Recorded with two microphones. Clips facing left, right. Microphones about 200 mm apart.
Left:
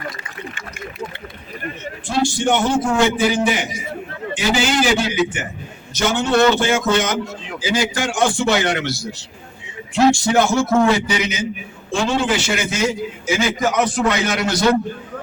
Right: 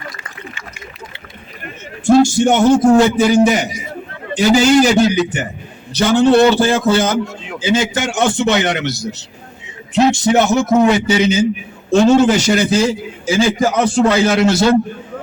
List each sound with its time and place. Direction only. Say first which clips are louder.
2.0 s a man's voice: right 8 dB; 45° right (ahead or behind); by 11.4 s 30° right (ahead or behind)
11.9 s a man's voice: right 9 dB; 40° right (ahead or behind); by 14.8 s 25° right (ahead or behind)